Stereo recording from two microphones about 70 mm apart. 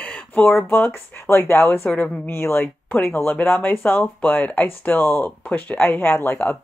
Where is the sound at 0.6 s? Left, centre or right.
Left.